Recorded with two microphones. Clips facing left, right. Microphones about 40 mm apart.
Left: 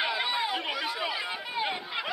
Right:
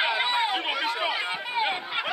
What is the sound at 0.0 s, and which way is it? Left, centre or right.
Run, right.